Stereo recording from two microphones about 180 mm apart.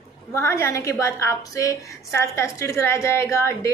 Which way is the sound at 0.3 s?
15° left (ahead or behind).